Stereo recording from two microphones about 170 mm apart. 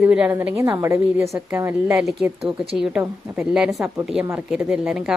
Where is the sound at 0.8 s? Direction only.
15° right (ahead or behind).